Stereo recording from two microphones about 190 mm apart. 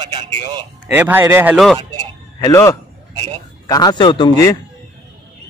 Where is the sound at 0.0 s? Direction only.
25° right (ahead or behind).